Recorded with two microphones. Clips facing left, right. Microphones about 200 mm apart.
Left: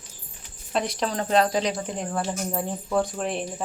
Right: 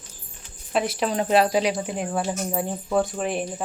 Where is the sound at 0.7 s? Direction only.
5° right (ahead or behind).